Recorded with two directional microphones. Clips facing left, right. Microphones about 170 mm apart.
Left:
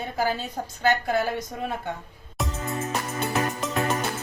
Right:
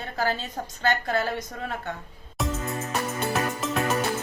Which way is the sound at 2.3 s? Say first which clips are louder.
Right 1 dB; centre (ahead or behind).